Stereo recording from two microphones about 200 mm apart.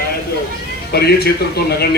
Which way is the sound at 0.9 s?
55° left (ahead or behind).